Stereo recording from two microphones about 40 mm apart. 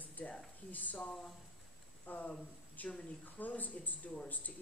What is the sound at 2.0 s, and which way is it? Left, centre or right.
Speech, left.